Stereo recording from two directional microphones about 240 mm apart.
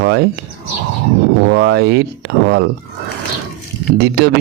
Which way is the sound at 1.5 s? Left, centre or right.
Right.